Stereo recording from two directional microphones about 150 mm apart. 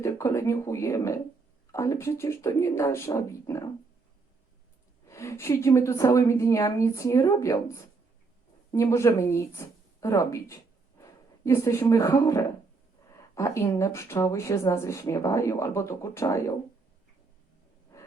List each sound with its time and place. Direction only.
0.0 s a woman's voice: 20° left (ahead or behind)
5.0 s a woman's voice: 20° left (ahead or behind)